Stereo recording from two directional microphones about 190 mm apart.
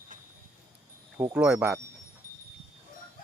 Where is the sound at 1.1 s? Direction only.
10° right (ahead or behind).